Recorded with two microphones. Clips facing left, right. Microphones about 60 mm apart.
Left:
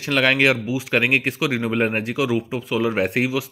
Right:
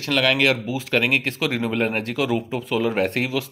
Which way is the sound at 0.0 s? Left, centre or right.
Left.